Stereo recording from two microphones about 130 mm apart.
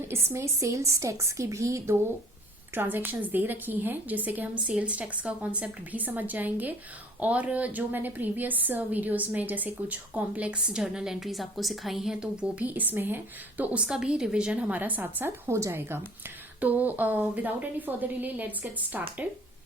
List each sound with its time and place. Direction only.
0.1 s a woman's voice: 20° right (ahead or behind)